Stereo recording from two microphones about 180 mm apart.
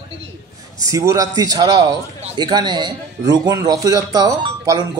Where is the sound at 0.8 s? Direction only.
20° right (ahead or behind).